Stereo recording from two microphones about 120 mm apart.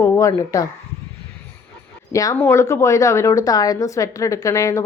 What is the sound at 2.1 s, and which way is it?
A woman's voice, 30° left (ahead or behind).